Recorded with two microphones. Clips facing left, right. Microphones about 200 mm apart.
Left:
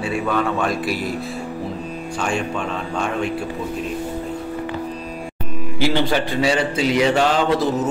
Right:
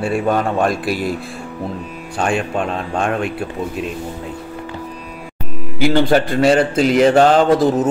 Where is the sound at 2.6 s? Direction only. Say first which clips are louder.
Right 4 dB; 60° right (ahead or behind).